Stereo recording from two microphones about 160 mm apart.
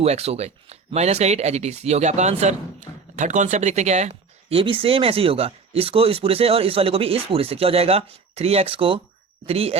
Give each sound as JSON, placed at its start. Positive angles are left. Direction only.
{"t": 0.0, "sound": "speech", "side_deg": -40}